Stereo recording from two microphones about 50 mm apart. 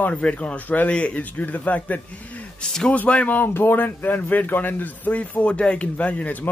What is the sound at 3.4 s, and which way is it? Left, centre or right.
Speech, left.